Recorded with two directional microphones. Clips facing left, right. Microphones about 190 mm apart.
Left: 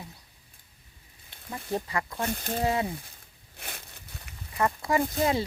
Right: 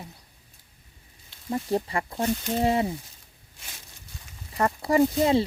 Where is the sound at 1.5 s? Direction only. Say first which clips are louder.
Right 6 dB; 30° right (ahead or behind).